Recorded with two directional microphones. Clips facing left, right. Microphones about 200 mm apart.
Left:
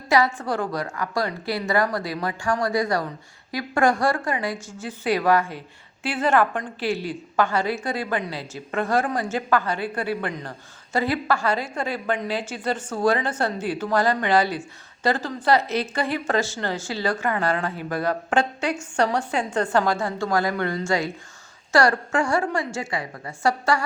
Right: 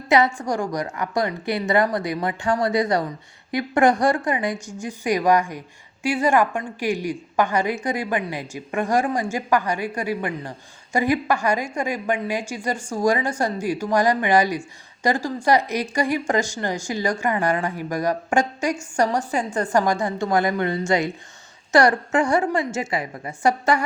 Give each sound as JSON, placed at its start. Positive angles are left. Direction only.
{"t": 0.3, "sound": "a woman's voice", "side_deg": -15}